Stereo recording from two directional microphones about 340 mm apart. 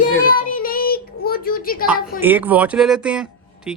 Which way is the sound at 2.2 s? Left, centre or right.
Centre.